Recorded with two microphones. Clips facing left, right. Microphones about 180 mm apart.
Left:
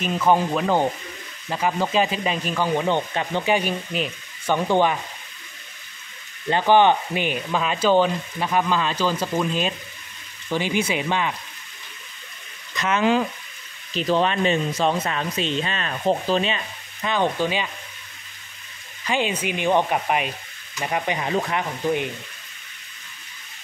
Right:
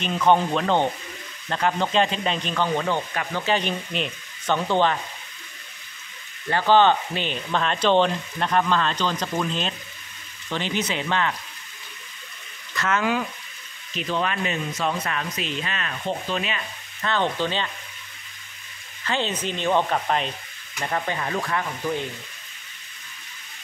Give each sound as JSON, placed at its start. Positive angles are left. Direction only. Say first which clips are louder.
{"t": 0.0, "sound": "speech", "louder": "even", "side_deg": 5}
{"t": 6.5, "sound": "speech", "louder": "left 1 dB", "side_deg": 15}
{"t": 12.7, "sound": "speech", "louder": "left 4 dB", "side_deg": 20}
{"t": 13.9, "sound": "speech", "louder": "left 5 dB", "side_deg": 35}
{"t": 17.0, "sound": "speech", "louder": "left 2 dB", "side_deg": 15}
{"t": 19.0, "sound": "speech", "louder": "left 2 dB", "side_deg": 10}